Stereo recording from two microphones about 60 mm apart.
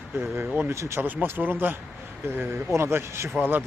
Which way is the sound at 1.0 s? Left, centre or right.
Right.